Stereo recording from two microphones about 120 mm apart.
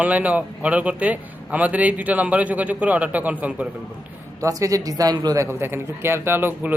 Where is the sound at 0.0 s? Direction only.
10° right (ahead or behind).